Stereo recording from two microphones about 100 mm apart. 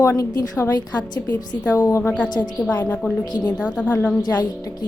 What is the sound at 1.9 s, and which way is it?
A woman's voice, 30° left (ahead or behind).